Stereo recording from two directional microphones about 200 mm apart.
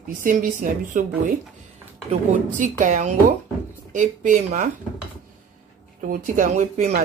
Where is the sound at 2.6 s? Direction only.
40° right (ahead or behind).